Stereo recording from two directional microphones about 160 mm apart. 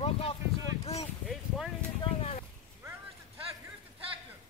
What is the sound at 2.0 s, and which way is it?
Speech, 40° left (ahead or behind).